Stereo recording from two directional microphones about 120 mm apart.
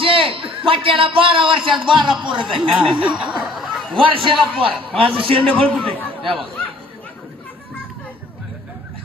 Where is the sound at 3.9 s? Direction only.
45° right (ahead or behind).